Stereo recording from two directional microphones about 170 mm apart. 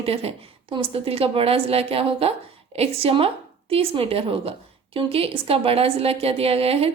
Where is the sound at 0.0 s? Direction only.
35° right (ahead or behind).